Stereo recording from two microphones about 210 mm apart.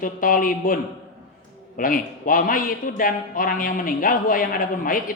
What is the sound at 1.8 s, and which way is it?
A man's voice, 40° left (ahead or behind).